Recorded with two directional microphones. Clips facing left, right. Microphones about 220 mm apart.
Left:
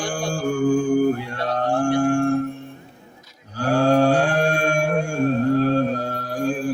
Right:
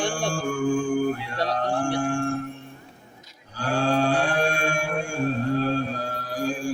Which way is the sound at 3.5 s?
40° left (ahead or behind).